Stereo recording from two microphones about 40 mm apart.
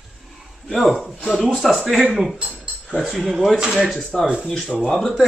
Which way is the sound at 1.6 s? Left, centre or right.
Centre.